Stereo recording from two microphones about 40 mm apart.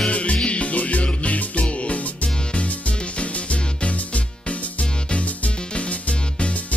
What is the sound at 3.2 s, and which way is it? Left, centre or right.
Music, left.